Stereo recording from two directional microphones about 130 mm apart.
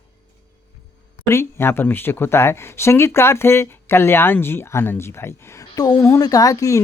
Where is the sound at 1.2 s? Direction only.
20° left (ahead or behind).